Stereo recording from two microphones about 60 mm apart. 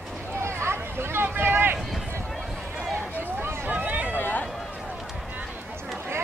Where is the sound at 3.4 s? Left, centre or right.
Right.